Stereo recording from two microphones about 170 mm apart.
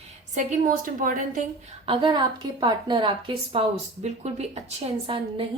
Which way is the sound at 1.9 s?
30° right (ahead or behind).